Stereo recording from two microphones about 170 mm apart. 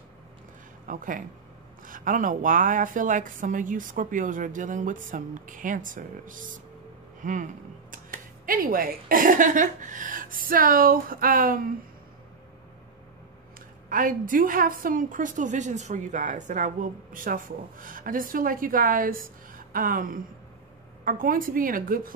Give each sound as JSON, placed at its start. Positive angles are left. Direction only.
{"t": 0.8, "sound": "a woman's voice", "side_deg": -50}
{"t": 13.8, "sound": "a woman's voice", "side_deg": -50}